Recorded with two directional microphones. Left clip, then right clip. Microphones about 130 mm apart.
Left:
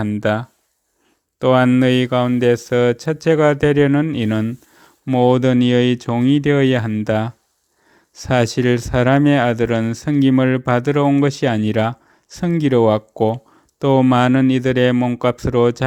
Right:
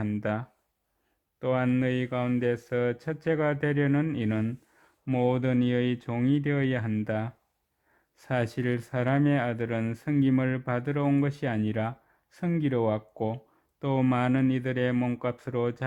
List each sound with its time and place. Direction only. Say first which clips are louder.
0.0 s speech: left 12 dB; 35° left (ahead or behind)
1.4 s speech: left 14 dB; 55° left (ahead or behind)
14.9 s speech: left 11 dB; 25° left (ahead or behind)
15.2 s speech: left 14 dB; 45° left (ahead or behind)